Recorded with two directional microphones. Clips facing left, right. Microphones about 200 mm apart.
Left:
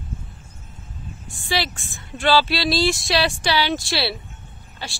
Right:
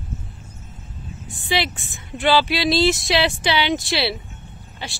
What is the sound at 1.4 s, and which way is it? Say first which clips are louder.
Speech: right 2 dB; 20° right (ahead or behind).